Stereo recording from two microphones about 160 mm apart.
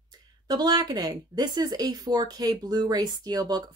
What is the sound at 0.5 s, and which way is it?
Speech, 25° right (ahead or behind).